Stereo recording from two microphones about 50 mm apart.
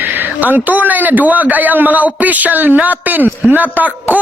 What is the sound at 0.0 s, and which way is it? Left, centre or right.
A man's voice, right.